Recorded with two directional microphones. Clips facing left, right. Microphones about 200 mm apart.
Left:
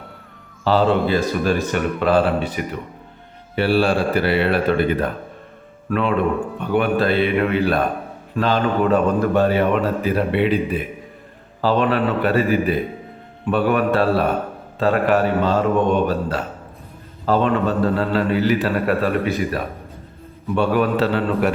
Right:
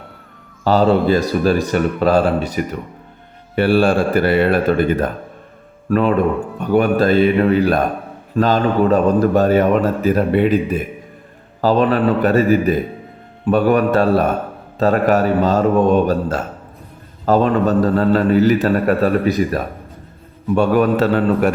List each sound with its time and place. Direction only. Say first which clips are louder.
0.6 s a man's voice: right 3 dB; 45° right (ahead or behind)